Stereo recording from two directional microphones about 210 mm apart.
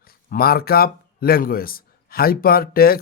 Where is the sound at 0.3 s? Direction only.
45° left (ahead or behind).